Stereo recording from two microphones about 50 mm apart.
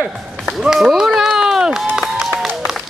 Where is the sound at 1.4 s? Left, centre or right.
Centre.